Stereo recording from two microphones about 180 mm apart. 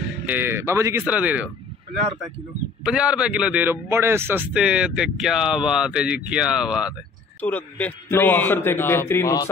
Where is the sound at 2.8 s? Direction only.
5° right (ahead or behind).